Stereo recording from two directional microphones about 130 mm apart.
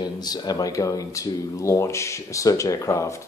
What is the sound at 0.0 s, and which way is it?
Speech, 30° left (ahead or behind).